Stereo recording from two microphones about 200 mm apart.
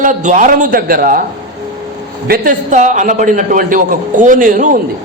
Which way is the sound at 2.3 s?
40° right (ahead or behind).